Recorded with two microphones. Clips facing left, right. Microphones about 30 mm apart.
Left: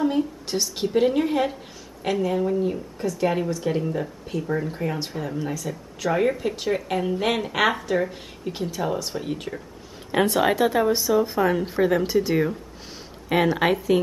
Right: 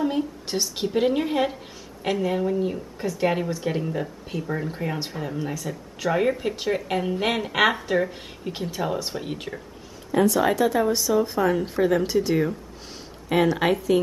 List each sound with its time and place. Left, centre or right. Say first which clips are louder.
0.0 s a woman's voice: left 2 dB; centre; by 3.7 s right
3.7 s a woman's voice: left 2 dB; centre
10.1 s a woman's voice: right 1 dB; left
10.4 s speech: left 1 dB; left